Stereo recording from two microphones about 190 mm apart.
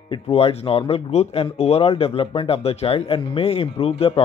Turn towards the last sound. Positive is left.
turn(degrees=30)  # may be behind; listen again after turning